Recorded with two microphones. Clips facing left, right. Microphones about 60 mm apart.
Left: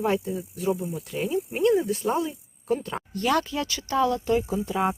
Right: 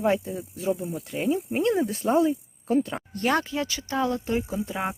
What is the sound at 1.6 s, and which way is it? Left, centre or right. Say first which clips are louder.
Speech: left 6 dB; right.